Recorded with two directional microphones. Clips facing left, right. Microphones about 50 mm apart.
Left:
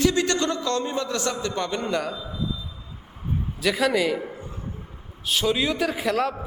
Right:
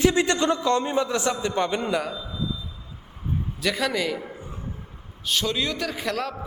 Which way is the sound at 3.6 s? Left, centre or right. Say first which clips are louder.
Left 4 dB; centre.